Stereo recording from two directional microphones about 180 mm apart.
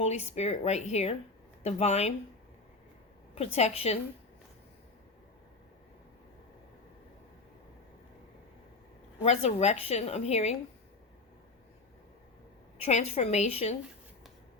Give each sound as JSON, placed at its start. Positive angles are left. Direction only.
{"t": 0.0, "sound": "a woman's voice", "side_deg": 40}
{"t": 3.3, "sound": "a woman's voice", "side_deg": 35}
{"t": 9.2, "sound": "a woman's voice", "side_deg": 35}
{"t": 12.8, "sound": "a woman's voice", "side_deg": 35}